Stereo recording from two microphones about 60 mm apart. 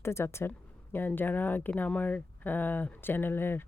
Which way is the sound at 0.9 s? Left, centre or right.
Left.